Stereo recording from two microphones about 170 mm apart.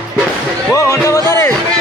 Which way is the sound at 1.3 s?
15° left (ahead or behind).